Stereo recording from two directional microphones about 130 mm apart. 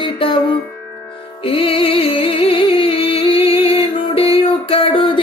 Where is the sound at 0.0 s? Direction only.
40° left (ahead or behind).